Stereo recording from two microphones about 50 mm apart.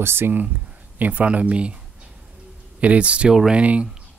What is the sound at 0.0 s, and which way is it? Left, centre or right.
Speech, right.